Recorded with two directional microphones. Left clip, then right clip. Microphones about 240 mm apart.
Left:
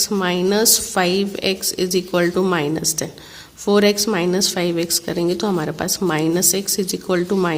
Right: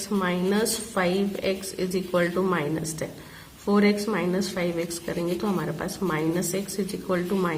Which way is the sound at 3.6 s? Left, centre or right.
Left.